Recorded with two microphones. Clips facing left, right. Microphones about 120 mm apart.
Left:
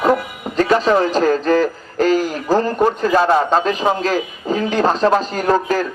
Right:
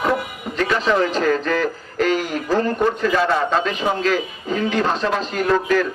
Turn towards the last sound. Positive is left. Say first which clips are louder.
# left 1 dB
turn(degrees=35)  # may be behind; listen again after turning